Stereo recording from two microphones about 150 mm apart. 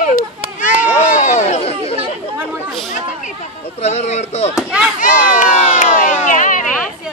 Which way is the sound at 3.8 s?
50° left (ahead or behind).